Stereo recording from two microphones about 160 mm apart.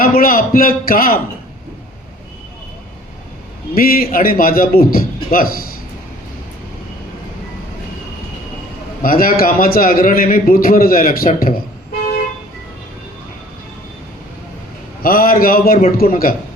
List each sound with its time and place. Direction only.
0.0 s a man's voice: 60° left (ahead or behind)
3.8 s a man's voice: 65° left (ahead or behind)
9.0 s a man's voice: 60° left (ahead or behind)
15.0 s a man's voice: 65° left (ahead or behind)